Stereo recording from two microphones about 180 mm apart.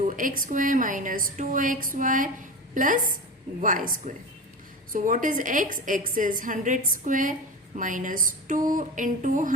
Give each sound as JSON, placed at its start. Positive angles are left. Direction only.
{"t": 0.0, "sound": "a woman's voice", "side_deg": -50}